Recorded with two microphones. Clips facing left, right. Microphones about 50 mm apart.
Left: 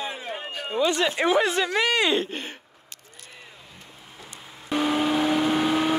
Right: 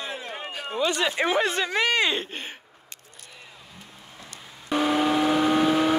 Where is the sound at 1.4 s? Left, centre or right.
Right.